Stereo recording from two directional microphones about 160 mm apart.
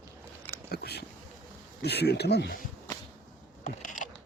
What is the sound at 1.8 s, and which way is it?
Speech, 90° left.